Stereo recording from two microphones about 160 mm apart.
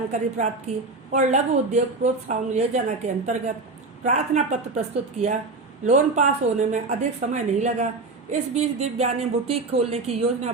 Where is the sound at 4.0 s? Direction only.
45° right (ahead or behind).